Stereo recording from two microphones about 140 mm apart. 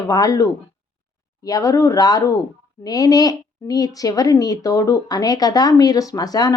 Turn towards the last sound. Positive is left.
turn(degrees=25)  # may be behind; listen again after turning